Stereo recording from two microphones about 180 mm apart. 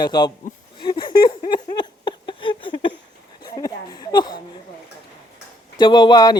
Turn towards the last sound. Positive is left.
turn(degrees=20)  # may be behind; listen again after turning